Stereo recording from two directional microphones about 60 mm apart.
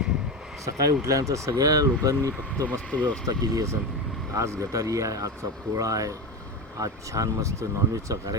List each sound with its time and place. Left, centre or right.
0.6 s speech: right
1.0 s speech: right
2.6 s speech: left
3.2 s speech: right
4.4 s speech: right